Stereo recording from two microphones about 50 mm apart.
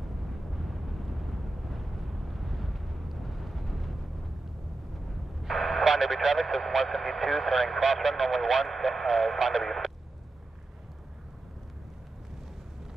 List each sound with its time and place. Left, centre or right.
0.6 s vehicle: centre
5.4 s speech: centre